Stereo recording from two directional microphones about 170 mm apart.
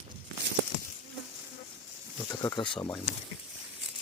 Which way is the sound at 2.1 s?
20° left (ahead or behind).